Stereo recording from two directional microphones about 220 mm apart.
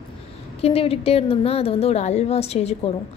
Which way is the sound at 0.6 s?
25° left (ahead or behind).